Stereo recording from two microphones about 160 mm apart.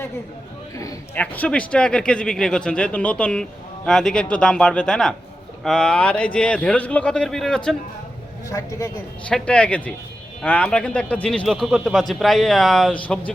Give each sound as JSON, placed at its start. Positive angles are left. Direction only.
{"t": 1.1, "sound": "speech", "side_deg": 10}
{"t": 8.4, "sound": "a man's voice", "side_deg": 20}
{"t": 9.3, "sound": "speech", "side_deg": 5}